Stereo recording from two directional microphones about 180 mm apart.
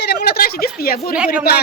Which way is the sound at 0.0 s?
65° left (ahead or behind).